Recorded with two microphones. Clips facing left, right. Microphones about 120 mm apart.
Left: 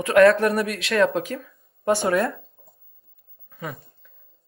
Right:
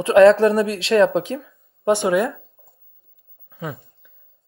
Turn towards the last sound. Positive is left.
turn(degrees=-20)  # may be behind; listen again after turning